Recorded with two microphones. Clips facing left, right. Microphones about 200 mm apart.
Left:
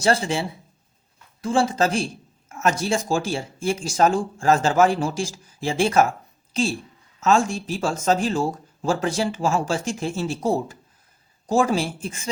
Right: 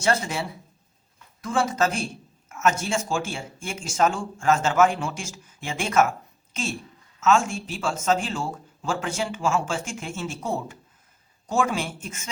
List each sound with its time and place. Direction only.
0.0 s speech: 30° left (ahead or behind)